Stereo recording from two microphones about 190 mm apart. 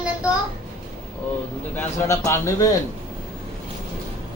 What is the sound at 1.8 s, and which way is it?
Speech, 15° left (ahead or behind).